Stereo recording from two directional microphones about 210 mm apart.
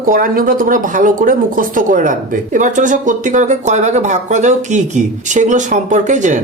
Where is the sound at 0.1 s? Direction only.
40° right (ahead or behind).